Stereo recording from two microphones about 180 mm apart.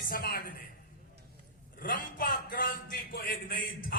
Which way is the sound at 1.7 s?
50° left (ahead or behind).